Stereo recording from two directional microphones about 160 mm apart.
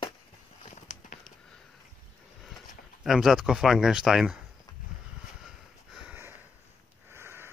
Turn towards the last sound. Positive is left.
turn(degrees=-15)  # may be behind; listen again after turning